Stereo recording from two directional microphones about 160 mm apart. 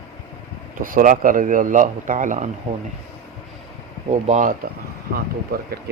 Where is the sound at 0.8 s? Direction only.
60° right (ahead or behind).